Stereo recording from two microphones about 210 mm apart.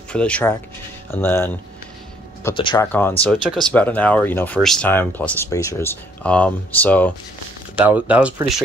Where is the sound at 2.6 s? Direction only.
25° left (ahead or behind).